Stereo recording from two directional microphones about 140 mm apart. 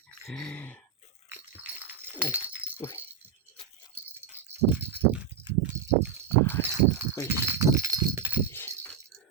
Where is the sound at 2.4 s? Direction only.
10° right (ahead or behind).